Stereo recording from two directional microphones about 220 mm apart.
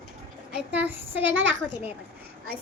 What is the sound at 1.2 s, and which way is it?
Speech, 60° right (ahead or behind).